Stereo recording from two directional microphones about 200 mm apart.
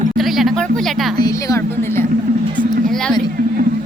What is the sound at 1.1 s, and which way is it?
Speech, 20° left (ahead or behind).